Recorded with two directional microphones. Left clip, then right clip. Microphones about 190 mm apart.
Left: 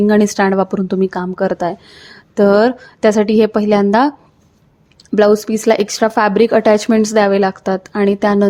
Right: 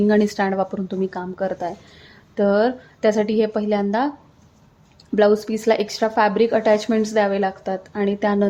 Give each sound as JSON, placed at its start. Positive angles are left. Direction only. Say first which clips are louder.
{"t": 0.1, "sound": "speech", "louder": "left 6 dB", "side_deg": 30}
{"t": 5.1, "sound": "a woman's voice", "louder": "left 5 dB", "side_deg": 25}